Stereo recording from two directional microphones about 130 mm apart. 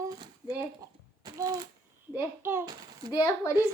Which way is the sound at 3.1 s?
25° left (ahead or behind).